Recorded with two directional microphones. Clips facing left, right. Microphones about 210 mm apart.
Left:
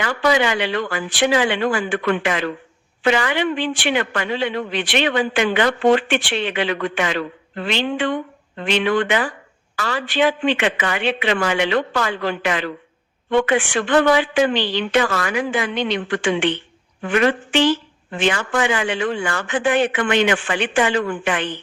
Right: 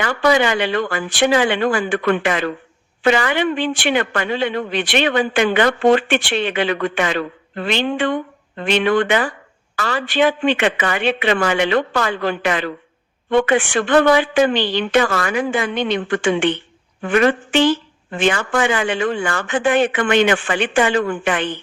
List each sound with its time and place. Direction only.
0.0 s speech: 50° right (ahead or behind)